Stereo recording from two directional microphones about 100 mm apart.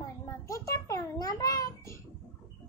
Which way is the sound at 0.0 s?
35° left (ahead or behind).